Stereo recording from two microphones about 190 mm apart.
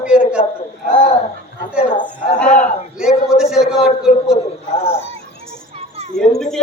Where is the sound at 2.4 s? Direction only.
5° left (ahead or behind).